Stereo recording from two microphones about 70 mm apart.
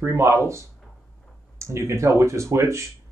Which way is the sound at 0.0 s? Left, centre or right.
Right.